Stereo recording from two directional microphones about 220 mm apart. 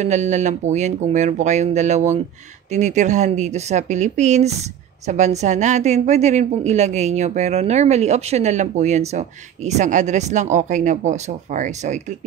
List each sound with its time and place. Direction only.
0.0 s a woman's voice: 30° right (ahead or behind)